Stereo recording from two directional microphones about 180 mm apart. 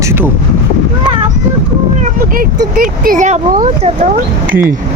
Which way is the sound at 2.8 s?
50° right (ahead or behind).